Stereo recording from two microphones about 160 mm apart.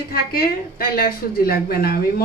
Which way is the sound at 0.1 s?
70° left (ahead or behind).